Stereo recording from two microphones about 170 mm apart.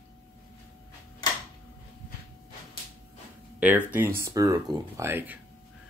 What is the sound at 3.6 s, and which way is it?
Speech, 10° right (ahead or behind).